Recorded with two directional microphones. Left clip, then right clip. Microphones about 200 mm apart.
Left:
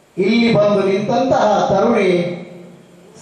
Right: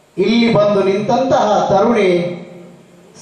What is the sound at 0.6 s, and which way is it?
A man's voice, 20° left (ahead or behind).